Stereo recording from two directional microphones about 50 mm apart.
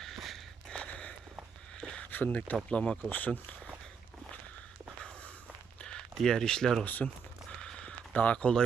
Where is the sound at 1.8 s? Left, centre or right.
Left.